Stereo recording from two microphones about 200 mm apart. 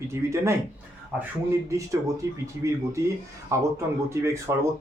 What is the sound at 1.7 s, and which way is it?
Speech, 15° right (ahead or behind).